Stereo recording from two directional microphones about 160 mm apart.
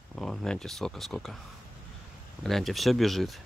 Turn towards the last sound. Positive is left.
turn(degrees=0)  # may be behind; listen again after turning